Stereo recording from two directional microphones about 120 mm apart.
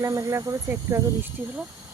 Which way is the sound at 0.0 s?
25° right (ahead or behind).